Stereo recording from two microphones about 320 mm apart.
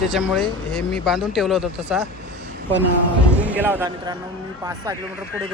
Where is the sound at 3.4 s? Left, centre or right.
Centre.